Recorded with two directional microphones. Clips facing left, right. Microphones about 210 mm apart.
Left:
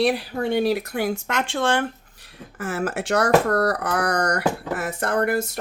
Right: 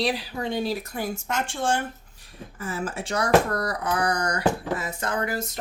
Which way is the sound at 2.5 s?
80° left.